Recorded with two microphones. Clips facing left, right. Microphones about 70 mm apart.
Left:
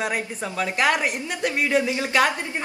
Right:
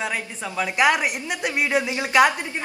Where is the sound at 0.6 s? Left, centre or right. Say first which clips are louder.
Right 2 dB; centre.